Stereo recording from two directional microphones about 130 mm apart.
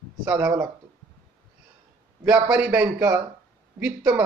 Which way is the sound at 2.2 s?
10° right (ahead or behind).